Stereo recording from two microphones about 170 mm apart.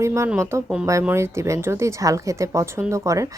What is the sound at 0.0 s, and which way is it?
A woman's voice, 15° right (ahead or behind).